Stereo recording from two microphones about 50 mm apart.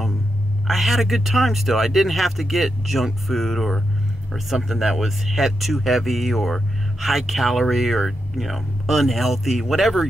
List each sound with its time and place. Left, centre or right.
0.7 s speech: centre